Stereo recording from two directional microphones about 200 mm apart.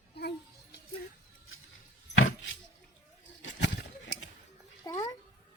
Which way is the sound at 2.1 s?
90° left.